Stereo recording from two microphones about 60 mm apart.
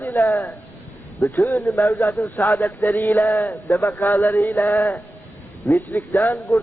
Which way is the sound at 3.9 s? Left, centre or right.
Left.